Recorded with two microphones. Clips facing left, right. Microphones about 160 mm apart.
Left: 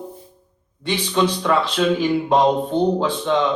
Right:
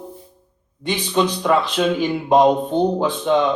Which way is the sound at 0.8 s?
15° right (ahead or behind).